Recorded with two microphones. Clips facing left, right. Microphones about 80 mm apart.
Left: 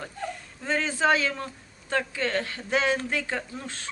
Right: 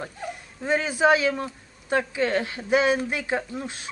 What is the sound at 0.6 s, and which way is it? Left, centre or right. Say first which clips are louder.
A woman's voice: right 4 dB; centre.